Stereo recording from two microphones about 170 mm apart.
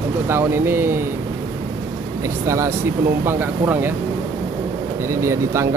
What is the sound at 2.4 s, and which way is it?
Speech, 15° right (ahead or behind).